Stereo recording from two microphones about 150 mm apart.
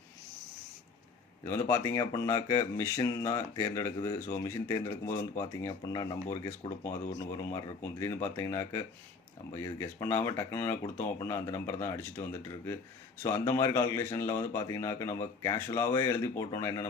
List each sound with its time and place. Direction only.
1.5 s speech: 15° left (ahead or behind)